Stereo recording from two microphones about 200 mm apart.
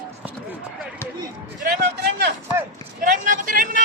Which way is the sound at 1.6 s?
50° right (ahead or behind).